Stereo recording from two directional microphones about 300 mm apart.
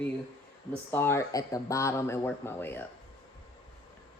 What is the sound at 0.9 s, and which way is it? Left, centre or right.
A man's voice, centre.